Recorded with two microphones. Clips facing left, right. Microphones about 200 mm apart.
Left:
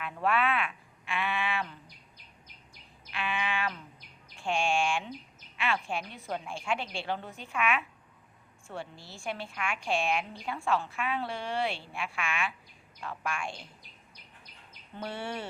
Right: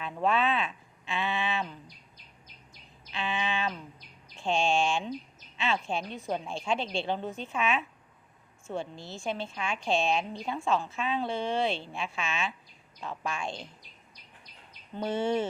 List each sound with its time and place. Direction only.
0.0 s a sound: 20° right (ahead or behind)
3.1 s bird: 25° right (ahead or behind)
4.4 s a woman's voice: 20° right (ahead or behind)
14.9 s a woman's voice: 20° right (ahead or behind)